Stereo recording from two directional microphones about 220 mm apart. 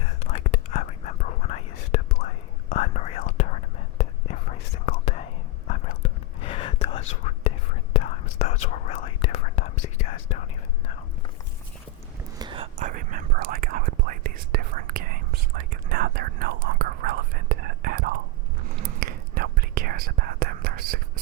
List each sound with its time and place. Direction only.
0.2 s whispering: 35° left (ahead or behind)
6.4 s whispering: 25° left (ahead or behind)
12.4 s whispering: 20° right (ahead or behind)
12.7 s whispering: 35° right (ahead or behind)